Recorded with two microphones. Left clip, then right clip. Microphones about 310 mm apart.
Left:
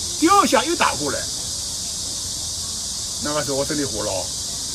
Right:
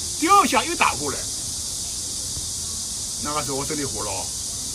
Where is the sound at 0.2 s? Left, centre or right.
Centre.